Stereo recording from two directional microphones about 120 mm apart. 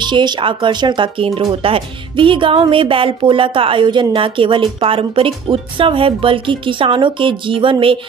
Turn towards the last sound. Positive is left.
turn(degrees=-45)  # may be behind; listen again after turning